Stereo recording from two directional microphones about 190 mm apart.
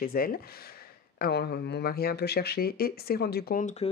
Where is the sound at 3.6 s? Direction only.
35° left (ahead or behind).